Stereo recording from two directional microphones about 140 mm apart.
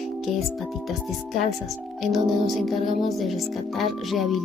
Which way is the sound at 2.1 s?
Centre (ahead or behind).